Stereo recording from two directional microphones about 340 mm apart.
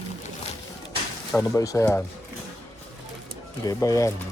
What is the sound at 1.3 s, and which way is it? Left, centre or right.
Speech, centre.